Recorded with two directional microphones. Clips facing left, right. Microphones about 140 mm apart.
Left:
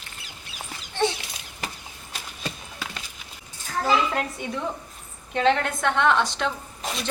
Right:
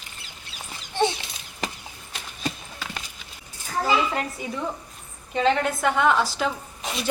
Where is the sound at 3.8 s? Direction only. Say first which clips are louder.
Even; 5° right (ahead or behind).